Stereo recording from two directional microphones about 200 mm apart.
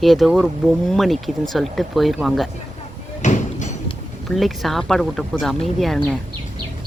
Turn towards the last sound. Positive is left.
turn(degrees=0)  # may be behind; listen again after turning